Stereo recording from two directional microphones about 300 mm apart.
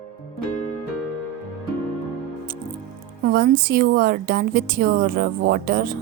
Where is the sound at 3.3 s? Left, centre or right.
Right.